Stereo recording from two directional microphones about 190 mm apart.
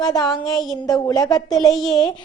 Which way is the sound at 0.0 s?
20° left (ahead or behind).